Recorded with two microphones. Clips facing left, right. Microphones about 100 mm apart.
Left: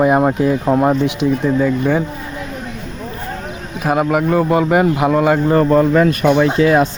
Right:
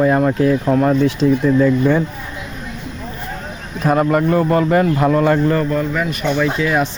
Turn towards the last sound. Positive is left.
turn(degrees=30)  # may be behind; listen again after turning